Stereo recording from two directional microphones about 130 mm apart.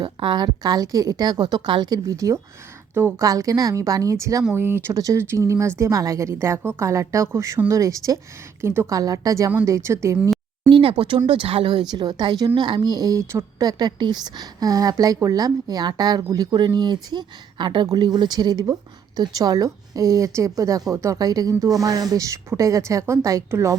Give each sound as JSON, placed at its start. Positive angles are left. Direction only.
{"t": 0.0, "sound": "a woman's voice", "side_deg": -35}
{"t": 10.7, "sound": "a woman's voice", "side_deg": -40}